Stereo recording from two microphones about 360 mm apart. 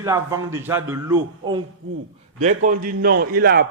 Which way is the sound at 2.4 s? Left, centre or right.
Right.